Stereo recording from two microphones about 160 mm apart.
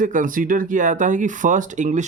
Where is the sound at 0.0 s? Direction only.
55° right (ahead or behind).